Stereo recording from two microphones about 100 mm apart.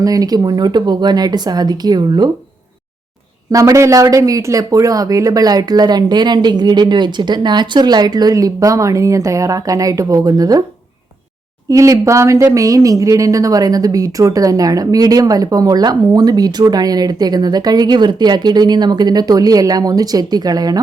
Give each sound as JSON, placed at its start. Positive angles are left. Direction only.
{"t": 0.0, "sound": "speech", "side_deg": -35}
{"t": 3.5, "sound": "speech", "side_deg": -30}
{"t": 11.7, "sound": "speech", "side_deg": -30}